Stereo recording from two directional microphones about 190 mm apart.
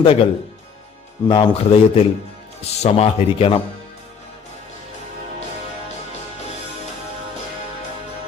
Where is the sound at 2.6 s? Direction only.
35° left (ahead or behind).